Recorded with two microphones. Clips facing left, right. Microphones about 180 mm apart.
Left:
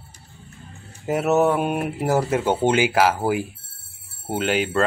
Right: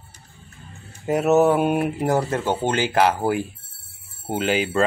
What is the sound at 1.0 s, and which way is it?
Speech, centre (ahead or behind).